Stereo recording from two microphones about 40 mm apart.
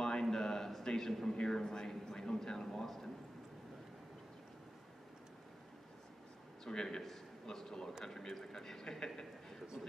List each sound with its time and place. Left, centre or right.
0.0 s a sound: centre
6.6 s a man's voice: centre
7.0 s a man's voice: centre
9.8 s speech: centre